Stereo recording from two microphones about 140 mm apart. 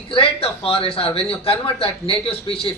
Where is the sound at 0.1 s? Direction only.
40° left (ahead or behind).